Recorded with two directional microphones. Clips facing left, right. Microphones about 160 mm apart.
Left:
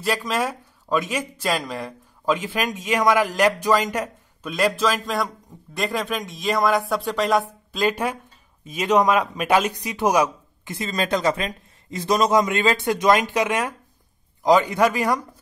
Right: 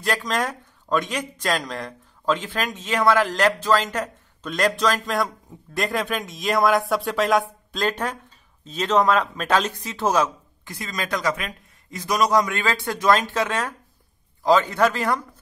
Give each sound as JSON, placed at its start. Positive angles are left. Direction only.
{"t": 0.0, "sound": "speech", "side_deg": 5}